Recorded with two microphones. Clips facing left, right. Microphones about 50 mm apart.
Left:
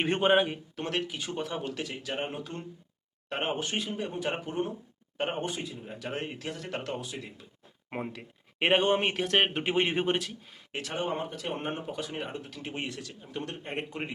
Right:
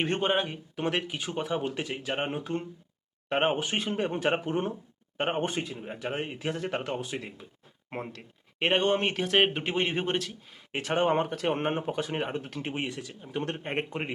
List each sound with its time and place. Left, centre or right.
0.0 s speech: centre
0.8 s speech: centre
3.8 s speech: right
4.3 s speech: right
7.9 s speech: centre
10.7 s speech: right
10.9 s speech: right
12.7 s speech: centre
13.4 s speech: right